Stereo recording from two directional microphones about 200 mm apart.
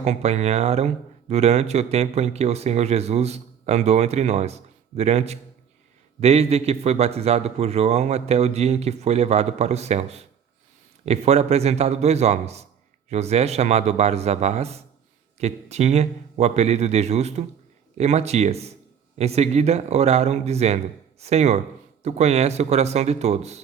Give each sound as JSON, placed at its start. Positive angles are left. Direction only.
{"t": 0.0, "sound": "speech", "side_deg": -35}